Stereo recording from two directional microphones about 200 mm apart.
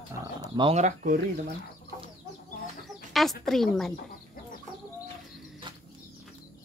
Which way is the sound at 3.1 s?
Centre (ahead or behind).